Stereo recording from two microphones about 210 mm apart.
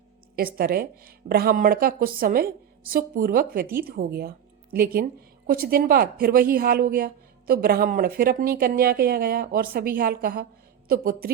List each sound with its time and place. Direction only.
0.3 s a woman's voice: 45° right (ahead or behind)